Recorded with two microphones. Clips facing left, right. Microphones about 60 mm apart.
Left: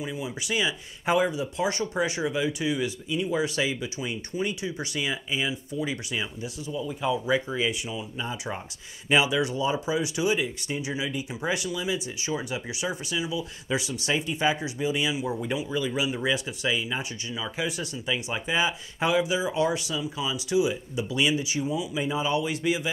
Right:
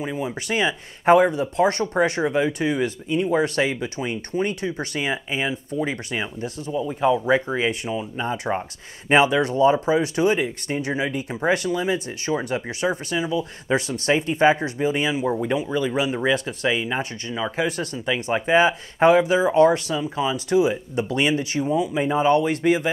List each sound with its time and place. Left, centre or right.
0.0 s speech: right
6.7 s speech: right
15.7 s speech: right
16.3 s speech: right
18.3 s speech: right